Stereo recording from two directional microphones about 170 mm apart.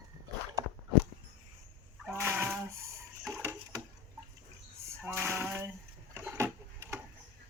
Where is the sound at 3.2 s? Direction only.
10° right (ahead or behind).